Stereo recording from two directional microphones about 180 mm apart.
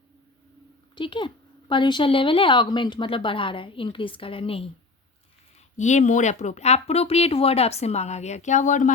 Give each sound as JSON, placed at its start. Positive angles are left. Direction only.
{"t": 0.9, "sound": "speech", "side_deg": 25}
{"t": 5.7, "sound": "speech", "side_deg": 40}